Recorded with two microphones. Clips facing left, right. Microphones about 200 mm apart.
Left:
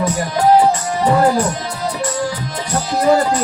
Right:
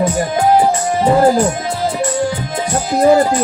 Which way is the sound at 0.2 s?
25° right (ahead or behind).